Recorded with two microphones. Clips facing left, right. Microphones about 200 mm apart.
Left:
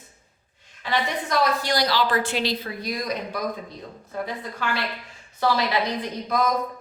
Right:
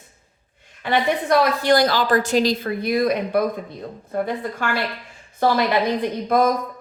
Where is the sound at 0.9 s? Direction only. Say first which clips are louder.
Right 7 dB; 55° right (ahead or behind).